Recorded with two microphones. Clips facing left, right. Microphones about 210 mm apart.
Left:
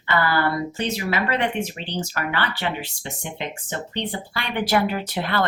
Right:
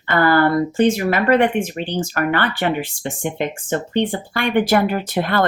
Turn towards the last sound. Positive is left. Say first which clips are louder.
# right 5 dB
turn(degrees=-50)  # may be behind; listen again after turning